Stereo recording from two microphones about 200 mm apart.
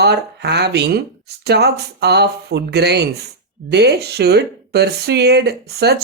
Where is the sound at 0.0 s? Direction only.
55° right (ahead or behind).